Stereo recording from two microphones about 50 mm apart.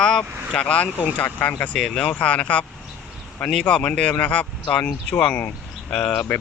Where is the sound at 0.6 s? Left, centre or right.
Left.